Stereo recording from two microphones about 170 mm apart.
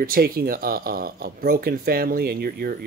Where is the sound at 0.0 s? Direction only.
65° right (ahead or behind).